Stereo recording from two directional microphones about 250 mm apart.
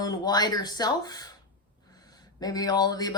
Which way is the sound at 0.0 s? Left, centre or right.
Centre.